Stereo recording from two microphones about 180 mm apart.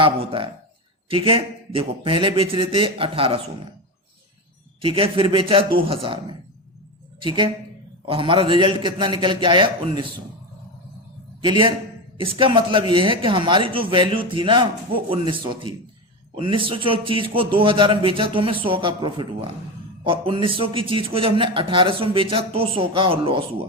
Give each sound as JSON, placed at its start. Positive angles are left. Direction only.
{"t": 0.0, "sound": "a man's voice", "side_deg": -30}
{"t": 4.8, "sound": "a man's voice", "side_deg": -30}
{"t": 7.2, "sound": "a man's voice", "side_deg": -25}
{"t": 11.4, "sound": "a man's voice", "side_deg": -25}